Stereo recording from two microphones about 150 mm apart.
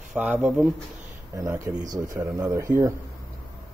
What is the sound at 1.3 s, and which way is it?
Speech, 20° right (ahead or behind).